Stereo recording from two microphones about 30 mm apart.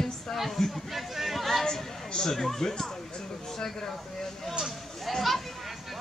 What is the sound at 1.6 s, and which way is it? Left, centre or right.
Speech, centre.